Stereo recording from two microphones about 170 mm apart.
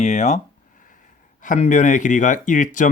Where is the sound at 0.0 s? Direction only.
40° left (ahead or behind).